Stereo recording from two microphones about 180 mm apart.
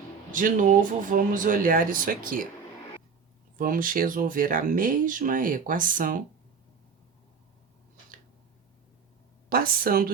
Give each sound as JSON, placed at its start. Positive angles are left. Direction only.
{"t": 0.3, "sound": "speech", "side_deg": -50}
{"t": 3.6, "sound": "speech", "side_deg": -50}
{"t": 9.5, "sound": "speech", "side_deg": -55}